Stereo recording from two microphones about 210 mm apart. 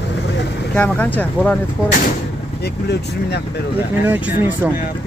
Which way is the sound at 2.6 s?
50° left (ahead or behind).